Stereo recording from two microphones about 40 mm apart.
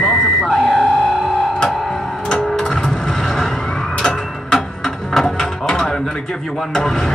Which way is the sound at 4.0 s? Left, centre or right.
Left.